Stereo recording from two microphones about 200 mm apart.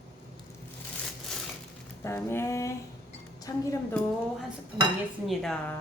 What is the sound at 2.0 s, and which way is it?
A woman's voice, 15° left (ahead or behind).